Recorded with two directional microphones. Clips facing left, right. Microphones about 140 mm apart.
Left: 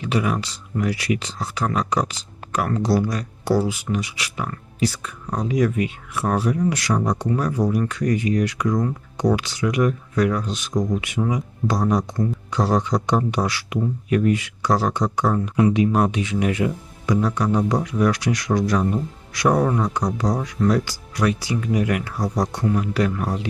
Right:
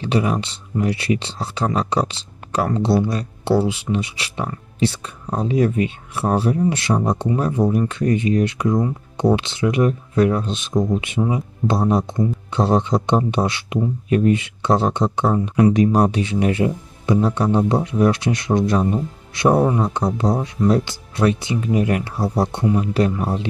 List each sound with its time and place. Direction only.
0.0 s speech: 30° right (ahead or behind)
15.6 s speech: 40° right (ahead or behind)